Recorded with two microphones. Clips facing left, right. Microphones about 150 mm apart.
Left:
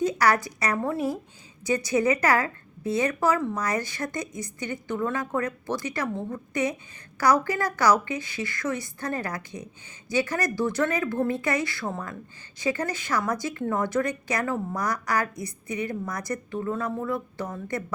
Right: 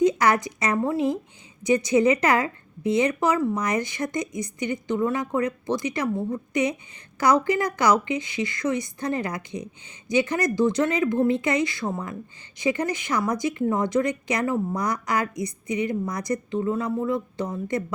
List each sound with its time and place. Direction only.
0.0 s a woman's voice: 20° right (ahead or behind)